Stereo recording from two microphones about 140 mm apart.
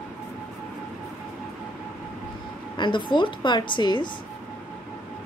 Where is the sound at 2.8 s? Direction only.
35° left (ahead or behind).